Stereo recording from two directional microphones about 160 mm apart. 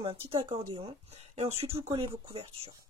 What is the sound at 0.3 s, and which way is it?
Speech, 35° right (ahead or behind).